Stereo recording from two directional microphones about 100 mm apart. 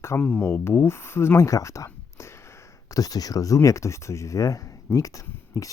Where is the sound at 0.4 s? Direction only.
25° left (ahead or behind).